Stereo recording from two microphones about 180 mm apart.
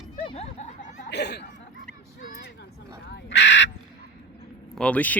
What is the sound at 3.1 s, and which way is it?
Crow, 75° left (ahead or behind).